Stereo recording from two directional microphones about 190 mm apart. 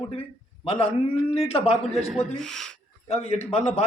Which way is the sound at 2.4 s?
5° left (ahead or behind).